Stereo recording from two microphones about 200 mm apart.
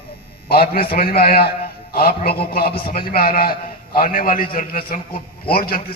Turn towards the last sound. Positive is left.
turn(degrees=45)  # may be behind; listen again after turning